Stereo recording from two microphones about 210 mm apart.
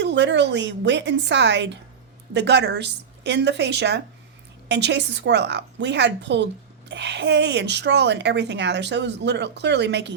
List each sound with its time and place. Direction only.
0.0 s a woman's voice: 60° right (ahead or behind)